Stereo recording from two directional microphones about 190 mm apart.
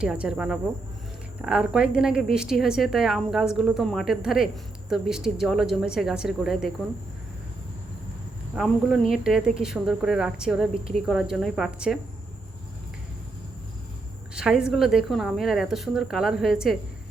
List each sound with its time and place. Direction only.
0.0 s a woman's voice: 5° right (ahead or behind)
8.5 s a woman's voice: centre (ahead or behind)
14.3 s a woman's voice: 5° right (ahead or behind)